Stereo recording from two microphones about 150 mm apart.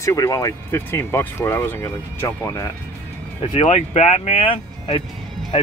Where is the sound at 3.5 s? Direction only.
50° left (ahead or behind).